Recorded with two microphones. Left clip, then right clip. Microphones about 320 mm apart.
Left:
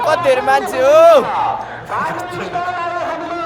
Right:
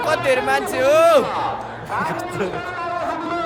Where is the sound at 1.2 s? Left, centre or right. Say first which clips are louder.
Left 5 dB; left.